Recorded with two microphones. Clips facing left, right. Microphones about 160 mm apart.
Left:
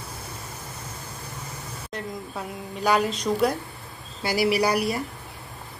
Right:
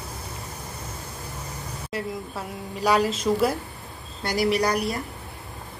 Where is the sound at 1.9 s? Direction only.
Centre (ahead or behind).